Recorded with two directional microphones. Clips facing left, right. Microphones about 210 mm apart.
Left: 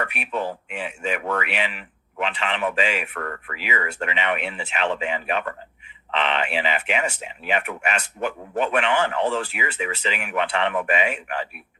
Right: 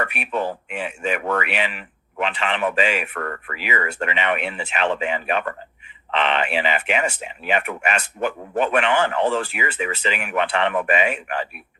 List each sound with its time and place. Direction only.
0.0 s speech: 50° right (ahead or behind)